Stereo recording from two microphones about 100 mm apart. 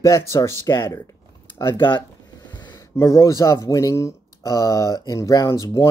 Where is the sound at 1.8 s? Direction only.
50° left (ahead or behind).